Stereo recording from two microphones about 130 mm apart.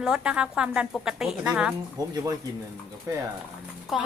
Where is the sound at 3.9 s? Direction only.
Centre (ahead or behind).